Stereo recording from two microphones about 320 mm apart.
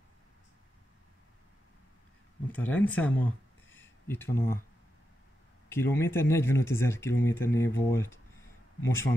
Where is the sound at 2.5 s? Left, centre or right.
Centre.